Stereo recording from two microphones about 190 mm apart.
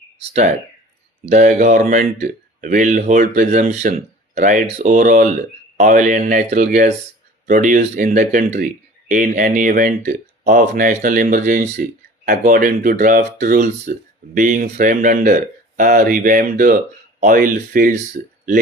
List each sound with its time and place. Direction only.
0.2 s speech: 35° right (ahead or behind)